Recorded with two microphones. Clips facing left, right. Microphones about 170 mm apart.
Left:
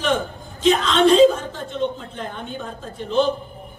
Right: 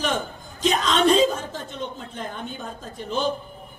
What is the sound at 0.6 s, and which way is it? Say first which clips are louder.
Speech: left 5 dB; 40° right (ahead or behind).